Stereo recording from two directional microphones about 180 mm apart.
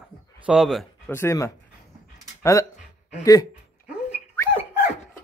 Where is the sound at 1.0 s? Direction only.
15° left (ahead or behind).